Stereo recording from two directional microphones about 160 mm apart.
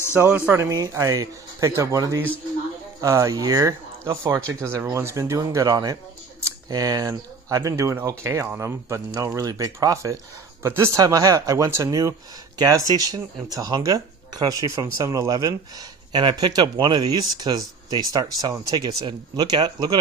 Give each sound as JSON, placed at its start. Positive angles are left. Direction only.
{"t": 0.1, "sound": "speech", "side_deg": -10}
{"t": 0.5, "sound": "speech", "side_deg": -20}